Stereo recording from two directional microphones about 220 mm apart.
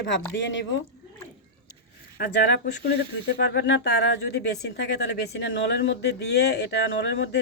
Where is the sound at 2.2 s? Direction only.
45° left (ahead or behind).